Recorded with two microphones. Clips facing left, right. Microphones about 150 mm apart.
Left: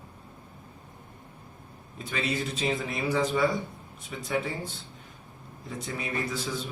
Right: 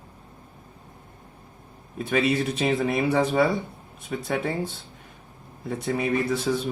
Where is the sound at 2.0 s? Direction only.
65° right (ahead or behind).